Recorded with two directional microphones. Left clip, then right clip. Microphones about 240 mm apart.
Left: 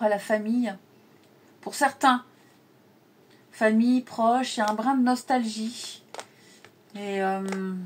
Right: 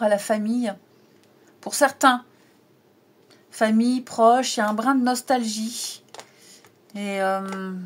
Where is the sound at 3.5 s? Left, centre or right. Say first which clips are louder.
Right 1 dB; right.